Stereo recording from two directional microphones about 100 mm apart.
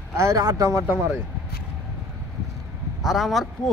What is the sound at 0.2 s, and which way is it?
Speech, 35° right (ahead or behind).